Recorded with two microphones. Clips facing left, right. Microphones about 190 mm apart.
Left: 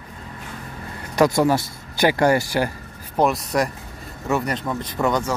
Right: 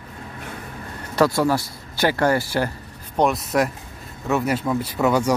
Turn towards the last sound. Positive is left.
turn(degrees=-10)  # may be behind; listen again after turning